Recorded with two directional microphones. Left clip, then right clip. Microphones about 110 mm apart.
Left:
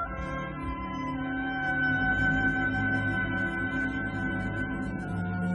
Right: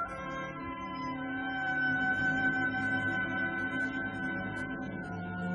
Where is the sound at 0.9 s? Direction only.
30° right (ahead or behind).